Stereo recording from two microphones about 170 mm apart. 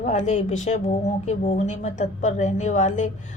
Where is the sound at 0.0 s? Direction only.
45° left (ahead or behind).